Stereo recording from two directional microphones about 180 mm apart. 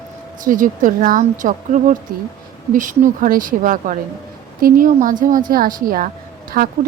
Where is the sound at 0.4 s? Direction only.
45° right (ahead or behind).